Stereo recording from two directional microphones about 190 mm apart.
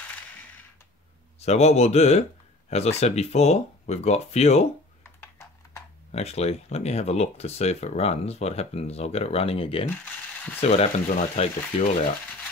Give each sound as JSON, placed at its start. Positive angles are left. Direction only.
{"t": 1.4, "sound": "speech", "side_deg": 35}
{"t": 5.0, "sound": "typing", "side_deg": 15}
{"t": 6.1, "sound": "speech", "side_deg": 35}